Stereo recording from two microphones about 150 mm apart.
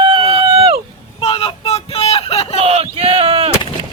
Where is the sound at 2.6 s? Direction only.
40° right (ahead or behind).